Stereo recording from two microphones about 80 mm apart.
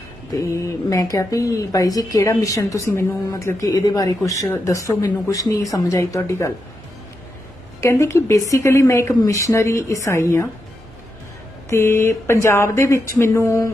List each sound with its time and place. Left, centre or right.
0.3 s a woman's voice: left
3.7 s a woman's voice: left
7.8 s speech: left
11.7 s speech: left